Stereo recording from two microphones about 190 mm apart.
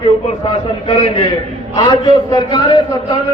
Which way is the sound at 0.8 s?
25° left (ahead or behind).